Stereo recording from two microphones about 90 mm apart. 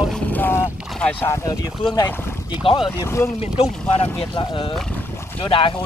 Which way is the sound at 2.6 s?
70° left (ahead or behind).